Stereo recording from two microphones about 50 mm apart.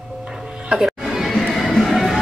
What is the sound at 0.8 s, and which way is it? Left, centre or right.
Music, centre.